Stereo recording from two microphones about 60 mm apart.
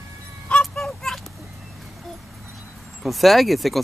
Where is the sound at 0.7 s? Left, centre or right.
Centre.